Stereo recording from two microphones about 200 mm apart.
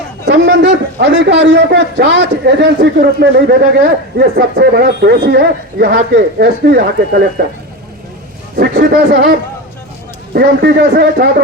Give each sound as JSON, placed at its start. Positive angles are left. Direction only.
{"t": 0.3, "sound": "a man's voice", "side_deg": -60}
{"t": 8.5, "sound": "a man's voice", "side_deg": -55}
{"t": 10.3, "sound": "a man's voice", "side_deg": -55}